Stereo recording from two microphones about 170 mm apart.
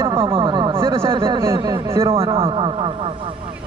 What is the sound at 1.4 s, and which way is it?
Speech, 20° right (ahead or behind).